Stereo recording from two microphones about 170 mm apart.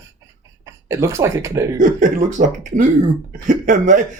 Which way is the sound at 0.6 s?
20° right (ahead or behind).